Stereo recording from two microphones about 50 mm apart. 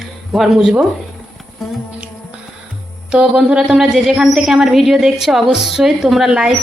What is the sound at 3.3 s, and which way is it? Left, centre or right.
Speech, centre.